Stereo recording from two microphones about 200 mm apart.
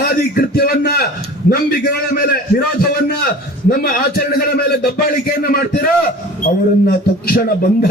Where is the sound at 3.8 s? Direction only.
50° left (ahead or behind).